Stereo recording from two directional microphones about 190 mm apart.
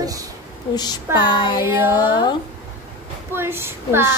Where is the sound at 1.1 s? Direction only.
25° left (ahead or behind).